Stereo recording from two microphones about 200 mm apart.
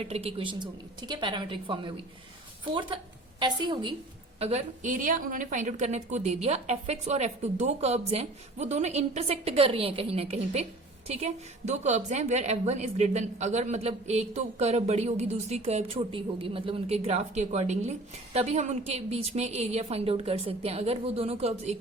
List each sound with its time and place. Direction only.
0.0 s a woman's voice: 30° right (ahead or behind)
3.4 s a woman's voice: 25° right (ahead or behind)